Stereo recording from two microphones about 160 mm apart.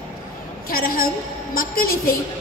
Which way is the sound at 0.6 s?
65° left (ahead or behind).